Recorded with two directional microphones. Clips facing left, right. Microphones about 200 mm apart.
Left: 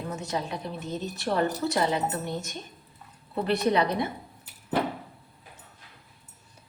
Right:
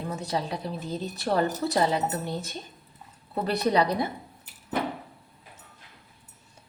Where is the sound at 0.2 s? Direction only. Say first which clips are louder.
Right 1 dB; 35° right (ahead or behind).